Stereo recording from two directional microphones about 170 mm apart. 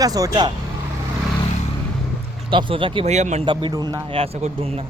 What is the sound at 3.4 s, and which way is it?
Speech, 30° right (ahead or behind).